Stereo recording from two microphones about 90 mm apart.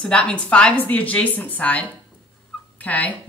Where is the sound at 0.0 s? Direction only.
10° left (ahead or behind).